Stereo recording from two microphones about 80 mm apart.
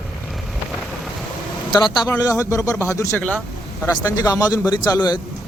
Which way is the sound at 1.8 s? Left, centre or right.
Left.